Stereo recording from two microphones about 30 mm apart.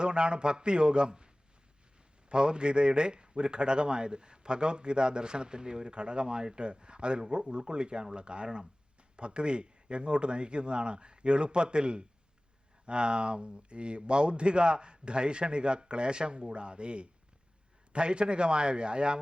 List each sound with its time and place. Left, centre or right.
0.0 s speech: right
2.3 s speech: right